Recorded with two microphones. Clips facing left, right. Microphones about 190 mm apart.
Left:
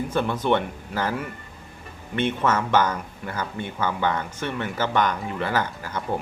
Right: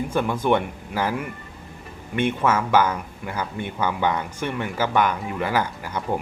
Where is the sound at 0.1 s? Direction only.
10° right (ahead or behind).